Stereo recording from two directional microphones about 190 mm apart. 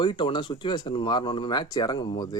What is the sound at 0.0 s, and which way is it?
Speech, 25° left (ahead or behind).